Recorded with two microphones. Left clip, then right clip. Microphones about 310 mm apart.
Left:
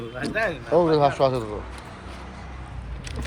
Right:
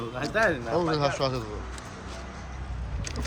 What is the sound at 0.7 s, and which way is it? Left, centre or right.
Speech, centre.